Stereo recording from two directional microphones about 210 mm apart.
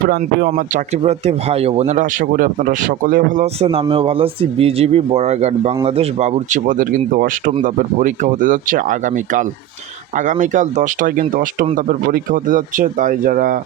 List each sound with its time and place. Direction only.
0.0 s speech: 50° right (ahead or behind)
1.0 s speech: 30° right (ahead or behind)